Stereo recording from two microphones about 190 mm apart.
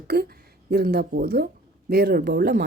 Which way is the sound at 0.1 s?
55° right (ahead or behind).